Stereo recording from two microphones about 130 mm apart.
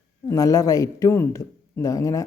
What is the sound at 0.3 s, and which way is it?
A man's voice, 25° left (ahead or behind).